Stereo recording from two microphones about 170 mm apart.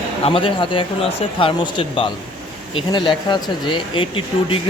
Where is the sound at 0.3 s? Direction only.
30° left (ahead or behind).